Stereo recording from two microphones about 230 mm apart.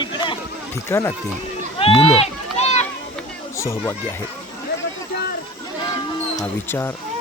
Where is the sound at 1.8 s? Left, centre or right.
Left.